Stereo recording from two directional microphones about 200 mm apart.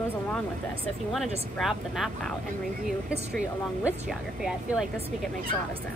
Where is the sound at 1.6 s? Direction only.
Centre (ahead or behind).